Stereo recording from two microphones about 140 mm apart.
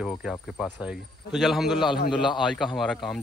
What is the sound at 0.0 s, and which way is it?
Speech, centre (ahead or behind).